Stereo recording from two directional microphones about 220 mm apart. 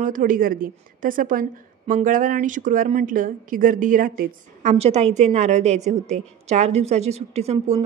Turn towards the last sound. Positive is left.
turn(degrees=-30)  # may be behind; listen again after turning